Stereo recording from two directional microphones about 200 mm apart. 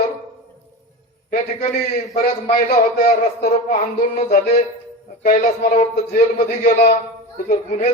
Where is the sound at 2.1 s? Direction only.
45° left (ahead or behind).